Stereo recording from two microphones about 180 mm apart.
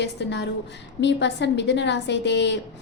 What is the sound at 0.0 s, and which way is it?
A woman's voice, 70° left (ahead or behind).